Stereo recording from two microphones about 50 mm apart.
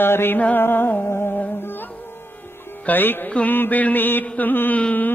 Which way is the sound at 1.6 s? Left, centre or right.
Left.